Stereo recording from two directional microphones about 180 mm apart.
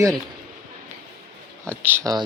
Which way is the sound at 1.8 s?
10° right (ahead or behind).